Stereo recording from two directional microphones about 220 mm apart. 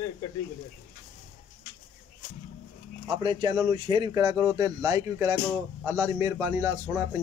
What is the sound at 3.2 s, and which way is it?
A man's voice, 20° right (ahead or behind).